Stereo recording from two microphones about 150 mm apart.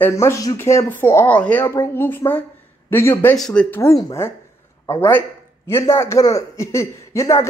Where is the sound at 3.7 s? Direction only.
15° left (ahead or behind).